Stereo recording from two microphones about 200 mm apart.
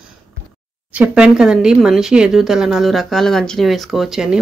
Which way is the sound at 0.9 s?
5° right (ahead or behind).